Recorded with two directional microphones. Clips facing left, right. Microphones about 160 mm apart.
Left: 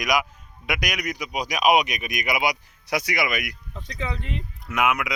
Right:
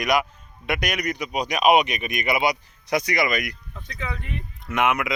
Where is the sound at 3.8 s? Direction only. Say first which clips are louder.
Left 2 dB; 30° left (ahead or behind).